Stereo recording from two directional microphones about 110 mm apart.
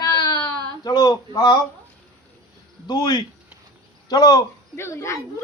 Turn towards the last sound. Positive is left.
turn(degrees=25)  # may be behind; listen again after turning